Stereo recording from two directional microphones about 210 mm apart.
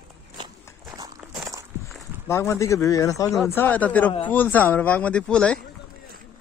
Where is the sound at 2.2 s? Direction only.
10° left (ahead or behind).